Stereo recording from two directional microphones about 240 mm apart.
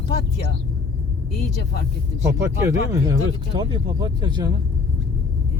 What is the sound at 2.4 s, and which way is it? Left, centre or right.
Speech, centre.